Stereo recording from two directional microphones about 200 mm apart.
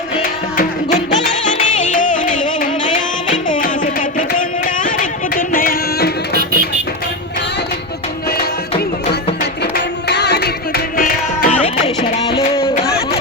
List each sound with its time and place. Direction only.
0.2 s music: 45° left (ahead or behind)
4.2 s carnatic music: 40° left (ahead or behind)
5.3 s music: 45° left (ahead or behind)
9.7 s music: 55° left (ahead or behind)
12.1 s music: 25° left (ahead or behind)